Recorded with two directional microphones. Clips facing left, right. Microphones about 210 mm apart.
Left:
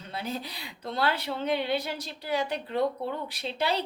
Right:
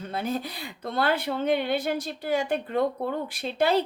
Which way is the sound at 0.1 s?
50° right (ahead or behind).